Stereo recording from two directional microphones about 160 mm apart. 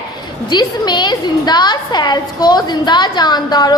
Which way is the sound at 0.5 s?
25° left (ahead or behind).